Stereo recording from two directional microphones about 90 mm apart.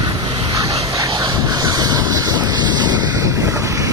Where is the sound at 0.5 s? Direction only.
40° right (ahead or behind).